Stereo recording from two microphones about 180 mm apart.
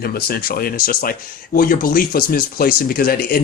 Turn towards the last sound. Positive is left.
turn(degrees=55)  # may be behind; listen again after turning